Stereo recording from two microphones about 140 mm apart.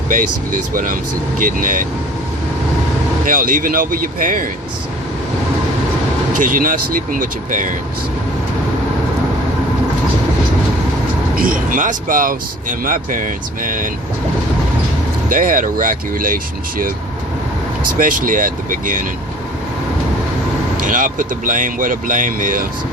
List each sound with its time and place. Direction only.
0.1 s speech: 70° right (ahead or behind)
3.2 s speech: 75° right (ahead or behind)
6.3 s speech: 70° right (ahead or behind)
11.3 s speech: 85° right
15.3 s speech: 75° right (ahead or behind)
17.9 s speech: 75° right (ahead or behind)
20.8 s speech: 70° right (ahead or behind)